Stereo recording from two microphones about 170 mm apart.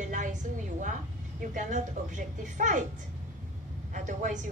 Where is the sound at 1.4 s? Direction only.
50° right (ahead or behind).